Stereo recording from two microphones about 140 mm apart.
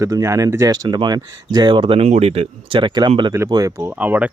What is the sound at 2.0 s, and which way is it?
Speech, 50° right (ahead or behind).